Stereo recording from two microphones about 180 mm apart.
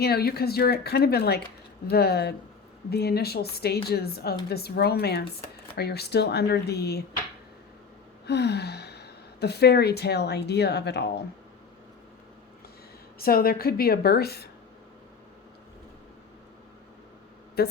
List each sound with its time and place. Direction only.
0.0 s a woman's voice: 60° left (ahead or behind)
8.3 s speech: 65° left (ahead or behind)
13.1 s a woman's voice: 55° left (ahead or behind)
17.6 s a woman's voice: 60° left (ahead or behind)